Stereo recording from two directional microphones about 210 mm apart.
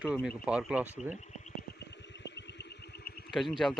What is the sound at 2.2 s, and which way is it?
Music, 55° left (ahead or behind).